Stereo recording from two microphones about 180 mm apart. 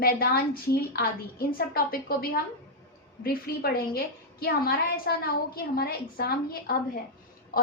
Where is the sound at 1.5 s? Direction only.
55° left (ahead or behind).